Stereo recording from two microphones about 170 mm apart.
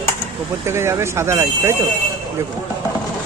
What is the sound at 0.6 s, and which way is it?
Speech, 15° right (ahead or behind).